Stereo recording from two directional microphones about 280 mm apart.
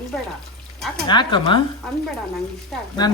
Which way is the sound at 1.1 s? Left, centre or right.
Centre.